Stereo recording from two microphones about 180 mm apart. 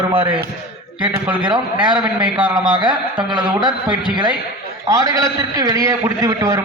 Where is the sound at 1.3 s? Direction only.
5° right (ahead or behind).